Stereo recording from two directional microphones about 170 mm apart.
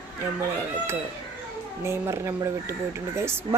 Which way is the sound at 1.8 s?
15° right (ahead or behind).